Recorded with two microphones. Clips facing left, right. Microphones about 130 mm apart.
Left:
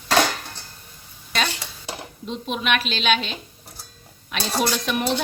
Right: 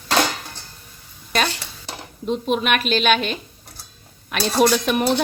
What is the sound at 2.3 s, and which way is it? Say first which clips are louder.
A woman's voice: right 5 dB; 45° right (ahead or behind).